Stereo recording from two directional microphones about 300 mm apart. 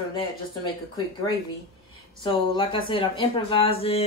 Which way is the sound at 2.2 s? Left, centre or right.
Centre.